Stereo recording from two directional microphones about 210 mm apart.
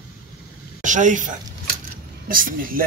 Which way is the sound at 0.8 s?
35° right (ahead or behind).